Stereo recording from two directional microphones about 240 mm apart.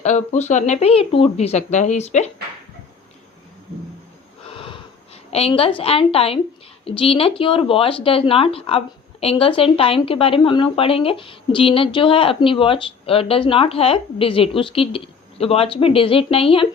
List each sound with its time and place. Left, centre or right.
0.0 s a woman's voice: left
4.5 s wheeze: left
5.3 s a woman's voice: left